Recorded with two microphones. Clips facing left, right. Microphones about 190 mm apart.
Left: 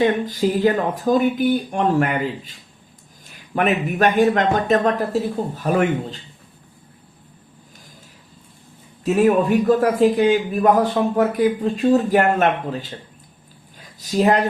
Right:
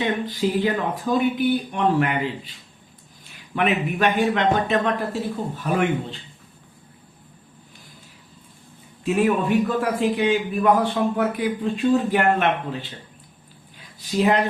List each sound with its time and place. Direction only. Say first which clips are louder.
0.0 s a man's voice: left 5 dB; 45° left (ahead or behind)
9.0 s a man's voice: left 4 dB; 40° left (ahead or behind)
13.7 s a sound: left 3 dB; 40° left (ahead or behind)